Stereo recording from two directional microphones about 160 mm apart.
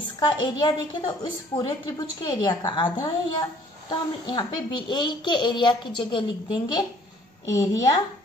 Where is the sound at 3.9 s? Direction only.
30° left (ahead or behind).